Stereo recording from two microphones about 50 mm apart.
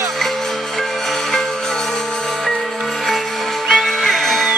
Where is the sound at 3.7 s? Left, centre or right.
Centre.